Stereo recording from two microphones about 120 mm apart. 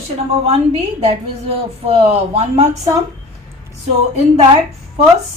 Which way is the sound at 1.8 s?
60° right (ahead or behind).